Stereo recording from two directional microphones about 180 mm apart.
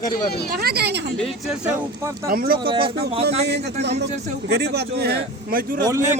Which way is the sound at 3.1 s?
35° right (ahead or behind).